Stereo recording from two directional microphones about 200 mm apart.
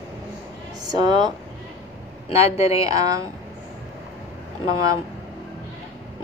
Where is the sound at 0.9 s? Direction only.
20° right (ahead or behind).